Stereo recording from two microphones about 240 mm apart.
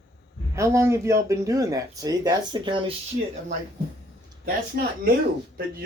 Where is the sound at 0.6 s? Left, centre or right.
Centre.